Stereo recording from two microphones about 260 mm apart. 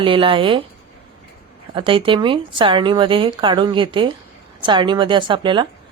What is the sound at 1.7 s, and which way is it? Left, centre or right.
A woman's voice, centre.